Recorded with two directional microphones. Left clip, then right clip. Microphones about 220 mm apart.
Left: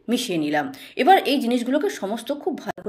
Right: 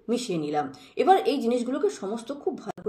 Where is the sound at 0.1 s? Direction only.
15° left (ahead or behind).